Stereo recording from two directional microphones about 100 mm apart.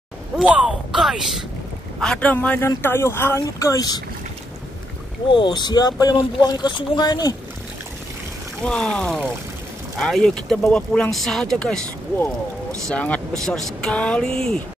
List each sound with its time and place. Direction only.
0.9 s a sound: 5° right (ahead or behind)
2.0 s speech: 10° left (ahead or behind); by 4.0 s 40° left (ahead or behind)
5.3 s speech: 50° left (ahead or behind)
8.6 s speech: 5° left (ahead or behind)
12.8 s speech: 10° left (ahead or behind)